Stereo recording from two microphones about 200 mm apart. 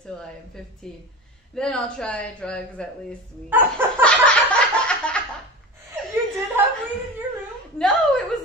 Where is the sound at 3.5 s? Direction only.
10° right (ahead or behind).